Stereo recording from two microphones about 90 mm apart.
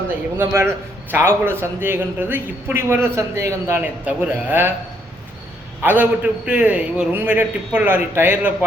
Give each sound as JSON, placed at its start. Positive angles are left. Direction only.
{"t": 0.3, "sound": "a man's voice", "side_deg": -30}
{"t": 5.8, "sound": "a man's voice", "side_deg": -20}